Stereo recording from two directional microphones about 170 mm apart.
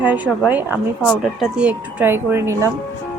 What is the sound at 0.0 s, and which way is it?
Speech, 10° right (ahead or behind).